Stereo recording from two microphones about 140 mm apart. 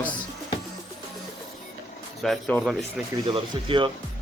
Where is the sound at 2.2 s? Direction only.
5° left (ahead or behind).